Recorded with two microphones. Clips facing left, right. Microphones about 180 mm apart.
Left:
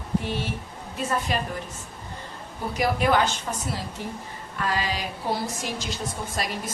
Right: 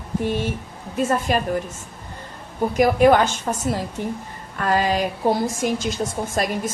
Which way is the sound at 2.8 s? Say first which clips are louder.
Right 7 dB; 50° right (ahead or behind).